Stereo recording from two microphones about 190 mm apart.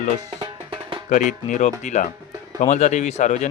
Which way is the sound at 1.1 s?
40° left (ahead or behind).